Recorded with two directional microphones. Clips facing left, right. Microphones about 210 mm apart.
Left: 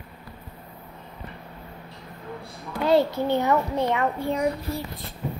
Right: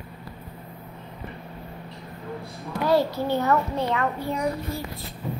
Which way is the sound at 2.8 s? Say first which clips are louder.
Left 2 dB; 20° left (ahead or behind).